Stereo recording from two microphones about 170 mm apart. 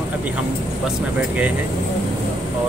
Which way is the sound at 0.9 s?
10° right (ahead or behind).